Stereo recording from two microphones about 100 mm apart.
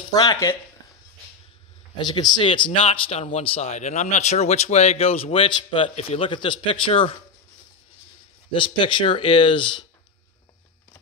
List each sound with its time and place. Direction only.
0.1 s speech: 40° left (ahead or behind)
2.0 s speech: 45° left (ahead or behind); by 3.7 s 75° left (ahead or behind)
4.2 s speech: 90° left; by 7.2 s 65° left (ahead or behind)
8.5 s speech: 55° left (ahead or behind)